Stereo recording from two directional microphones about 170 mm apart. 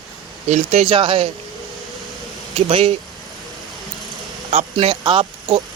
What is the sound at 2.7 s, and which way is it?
Speech, 35° right (ahead or behind).